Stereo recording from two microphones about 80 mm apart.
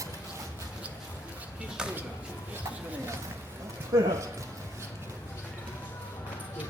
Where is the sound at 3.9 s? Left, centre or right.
Right.